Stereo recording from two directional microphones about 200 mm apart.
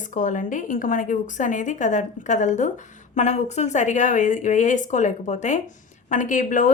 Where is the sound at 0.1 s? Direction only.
40° left (ahead or behind).